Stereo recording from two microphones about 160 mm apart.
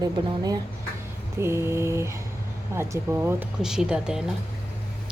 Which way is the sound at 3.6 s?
5° right (ahead or behind).